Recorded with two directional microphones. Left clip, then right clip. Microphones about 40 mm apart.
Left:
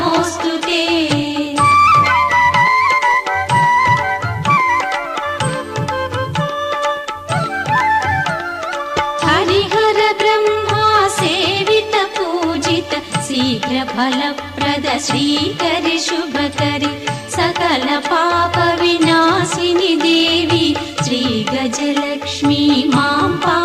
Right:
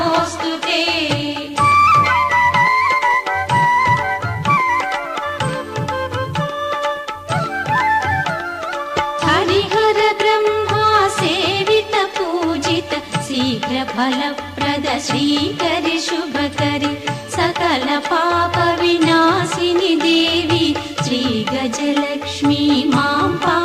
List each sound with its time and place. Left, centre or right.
0.0 s music: right
2.1 s music: right
7.7 s music: right
10.8 s music of bollywood: right
11.4 s music: right
17.3 s carnatic music: right
22.4 s music: right